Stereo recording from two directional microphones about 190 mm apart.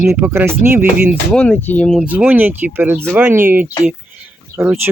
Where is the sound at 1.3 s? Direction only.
5° left (ahead or behind).